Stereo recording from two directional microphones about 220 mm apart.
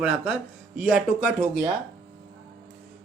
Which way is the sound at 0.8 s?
Centre (ahead or behind).